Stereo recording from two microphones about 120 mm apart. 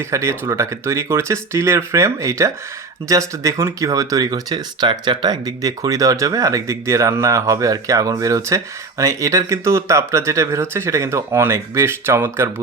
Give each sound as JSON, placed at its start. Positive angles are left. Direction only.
{"t": 0.0, "sound": "speech", "side_deg": -20}